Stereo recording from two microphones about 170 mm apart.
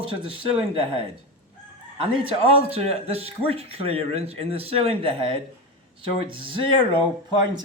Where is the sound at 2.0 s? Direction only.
35° right (ahead or behind).